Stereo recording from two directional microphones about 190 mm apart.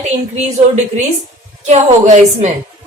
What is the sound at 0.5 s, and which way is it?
A woman's voice, 40° right (ahead or behind).